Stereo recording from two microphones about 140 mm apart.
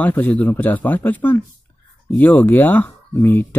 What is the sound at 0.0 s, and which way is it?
Speech, 10° left (ahead or behind).